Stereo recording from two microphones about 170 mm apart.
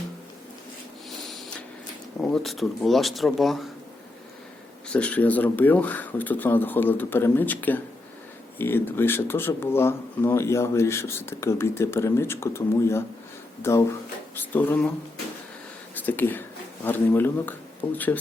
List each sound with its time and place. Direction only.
2.3 s speech: centre (ahead or behind)
4.9 s speech: 5° left (ahead or behind)
16.0 s speech: 10° left (ahead or behind)